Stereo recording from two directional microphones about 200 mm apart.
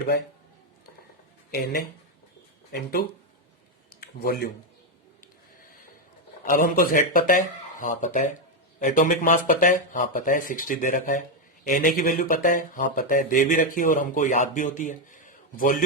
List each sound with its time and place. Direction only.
1.5 s speech: 50° left (ahead or behind)
3.8 s a sound: 50° left (ahead or behind)
6.5 s speech: 45° left (ahead or behind)